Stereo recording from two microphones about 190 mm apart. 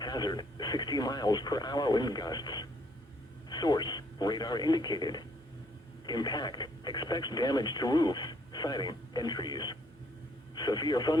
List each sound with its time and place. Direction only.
0.0 s speech: 20° left (ahead or behind)